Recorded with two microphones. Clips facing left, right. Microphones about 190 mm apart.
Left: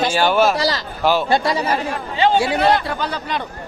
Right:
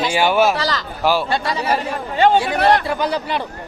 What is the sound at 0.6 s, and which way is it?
Speech, 35° left (ahead or behind).